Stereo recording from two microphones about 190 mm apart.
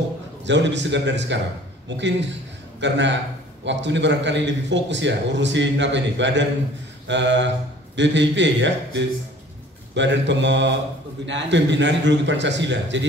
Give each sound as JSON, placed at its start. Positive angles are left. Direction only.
{"t": 0.5, "sound": "a man's voice", "side_deg": -70}